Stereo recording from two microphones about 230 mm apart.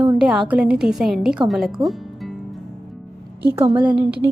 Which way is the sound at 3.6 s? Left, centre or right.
Right.